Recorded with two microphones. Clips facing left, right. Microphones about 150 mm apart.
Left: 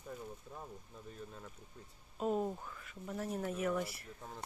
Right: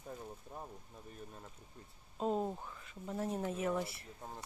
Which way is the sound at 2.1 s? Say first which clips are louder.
Even; 25° right (ahead or behind).